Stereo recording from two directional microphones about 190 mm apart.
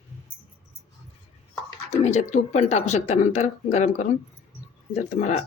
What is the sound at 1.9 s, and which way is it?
Speech, 35° left (ahead or behind).